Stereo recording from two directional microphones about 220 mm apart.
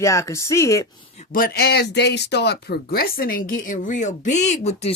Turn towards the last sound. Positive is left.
turn(degrees=30)  # may be behind; listen again after turning